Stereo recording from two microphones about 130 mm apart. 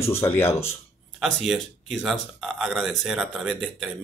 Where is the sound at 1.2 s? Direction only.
Centre (ahead or behind).